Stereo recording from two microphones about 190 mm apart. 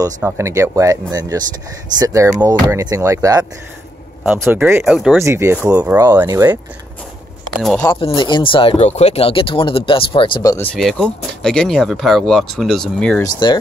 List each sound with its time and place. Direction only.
0.2 s speech: 15° right (ahead or behind)
7.6 s speech: 5° left (ahead or behind)
8.0 s speech: 25° left (ahead or behind)
10.7 s speech: centre (ahead or behind)
13.2 s speech: 25° left (ahead or behind)